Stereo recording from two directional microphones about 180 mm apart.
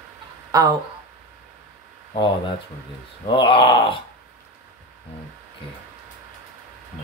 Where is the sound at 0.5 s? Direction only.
20° right (ahead or behind).